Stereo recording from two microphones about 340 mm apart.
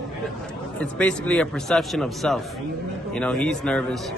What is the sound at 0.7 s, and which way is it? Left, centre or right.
A man's voice, centre.